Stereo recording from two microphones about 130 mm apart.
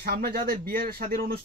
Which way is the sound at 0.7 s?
90° right.